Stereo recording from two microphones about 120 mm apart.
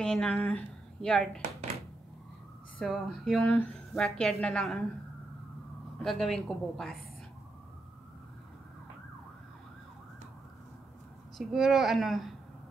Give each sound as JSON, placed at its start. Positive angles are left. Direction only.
{"t": 0.0, "sound": "speech", "side_deg": 5}
{"t": 2.8, "sound": "speech", "side_deg": 0}
{"t": 6.0, "sound": "speech", "side_deg": 0}
{"t": 11.3, "sound": "speech", "side_deg": 0}